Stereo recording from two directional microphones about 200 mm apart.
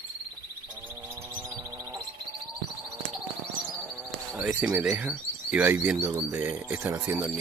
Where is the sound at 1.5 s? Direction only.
20° right (ahead or behind).